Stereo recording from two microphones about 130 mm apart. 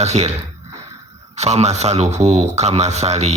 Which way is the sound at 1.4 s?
55° right (ahead or behind).